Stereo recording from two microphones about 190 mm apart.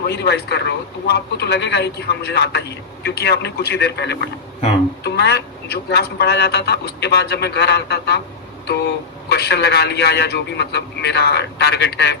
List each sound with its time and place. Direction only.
0.1 s a man's voice: 60° left (ahead or behind)
9.3 s a man's voice: 60° left (ahead or behind)